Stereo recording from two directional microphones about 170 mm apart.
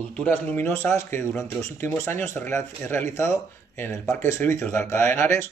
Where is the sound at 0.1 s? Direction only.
10° left (ahead or behind).